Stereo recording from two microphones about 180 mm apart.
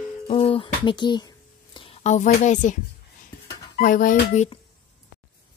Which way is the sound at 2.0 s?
45° left (ahead or behind).